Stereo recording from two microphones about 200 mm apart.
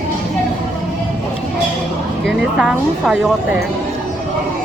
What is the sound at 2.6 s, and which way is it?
Speech, 5° right (ahead or behind).